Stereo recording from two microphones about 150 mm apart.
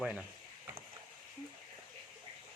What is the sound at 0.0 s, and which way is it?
Speech, 10° right (ahead or behind).